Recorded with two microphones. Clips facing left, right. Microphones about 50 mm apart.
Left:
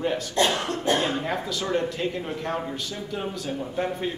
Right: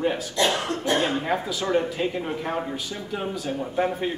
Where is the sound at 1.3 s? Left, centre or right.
Centre.